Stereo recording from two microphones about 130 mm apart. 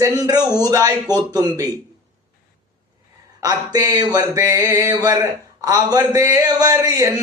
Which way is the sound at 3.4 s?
30° right (ahead or behind).